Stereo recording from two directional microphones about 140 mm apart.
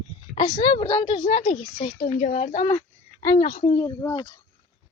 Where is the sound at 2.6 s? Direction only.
30° left (ahead or behind).